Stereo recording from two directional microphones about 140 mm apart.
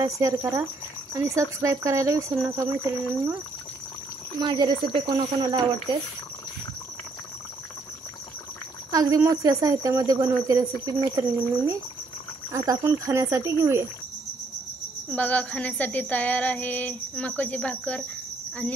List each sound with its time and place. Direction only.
0.0 s speech: 25° right (ahead or behind)
4.4 s speech: 30° right (ahead or behind)
8.9 s speech: 25° right (ahead or behind)
15.1 s a sound: 10° left (ahead or behind)